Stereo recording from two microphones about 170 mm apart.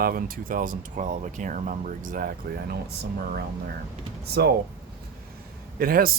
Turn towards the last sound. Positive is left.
turn(degrees=-60)  # may be behind; listen again after turning